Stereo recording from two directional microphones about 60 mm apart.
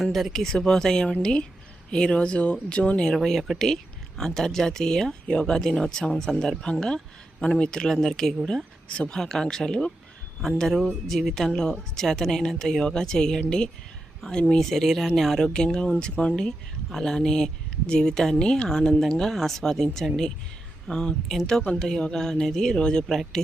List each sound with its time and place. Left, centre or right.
0.0 s speech: centre
3.2 s speech: centre
8.9 s speech: centre
15.4 s speech: centre